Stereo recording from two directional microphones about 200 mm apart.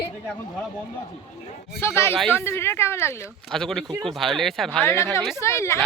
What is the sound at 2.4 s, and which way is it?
Speech, 10° left (ahead or behind).